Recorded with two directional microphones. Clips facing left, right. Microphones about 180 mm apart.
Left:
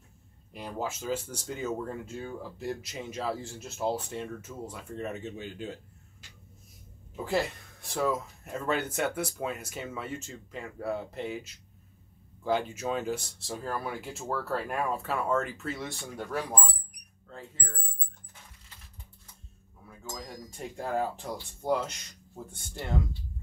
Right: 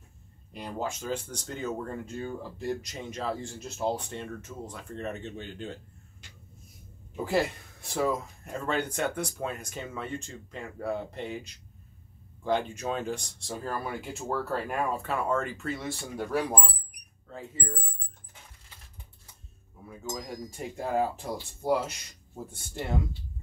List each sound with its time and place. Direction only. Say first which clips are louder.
0.5 s speech: right 1 dB; 5° left (ahead or behind)
7.2 s speech: right 2 dB; centre (ahead or behind)
19.9 s speech: right 5 dB; 10° right (ahead or behind)